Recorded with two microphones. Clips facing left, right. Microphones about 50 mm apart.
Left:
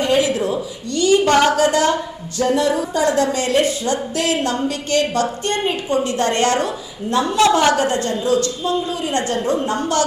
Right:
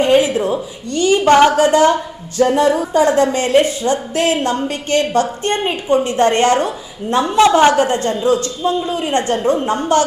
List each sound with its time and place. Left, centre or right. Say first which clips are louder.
0.0 s a woman's voice: right 4 dB; right
2.4 s a sound: right 4 dB; right
3.3 s a woman's voice: right 4 dB; right